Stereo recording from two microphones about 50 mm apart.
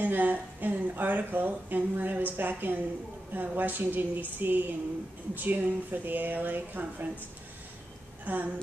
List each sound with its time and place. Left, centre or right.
0.0 s speech: right
8.3 s speech: right